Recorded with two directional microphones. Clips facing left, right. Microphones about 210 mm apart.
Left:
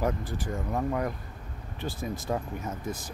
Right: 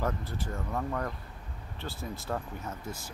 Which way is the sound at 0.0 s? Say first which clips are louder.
Left 4 dB; 15° left (ahead or behind).